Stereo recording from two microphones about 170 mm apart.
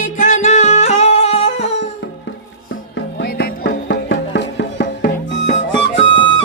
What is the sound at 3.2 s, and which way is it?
Music, 70° left (ahead or behind).